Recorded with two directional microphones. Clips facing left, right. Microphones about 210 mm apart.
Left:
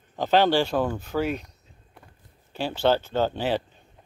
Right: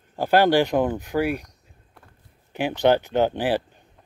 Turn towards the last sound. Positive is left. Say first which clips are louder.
# right 3 dB
turn(degrees=-15)  # may be behind; listen again after turning